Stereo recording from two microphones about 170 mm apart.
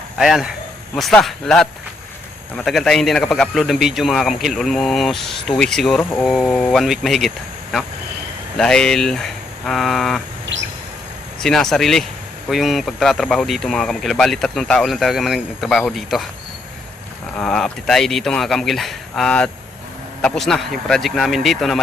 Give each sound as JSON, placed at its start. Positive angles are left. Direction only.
{"t": 0.2, "sound": "speech", "side_deg": 0}
{"t": 10.5, "sound": "a sound", "side_deg": -90}
{"t": 11.4, "sound": "speech", "side_deg": 5}
{"t": 17.3, "sound": "speech", "side_deg": 5}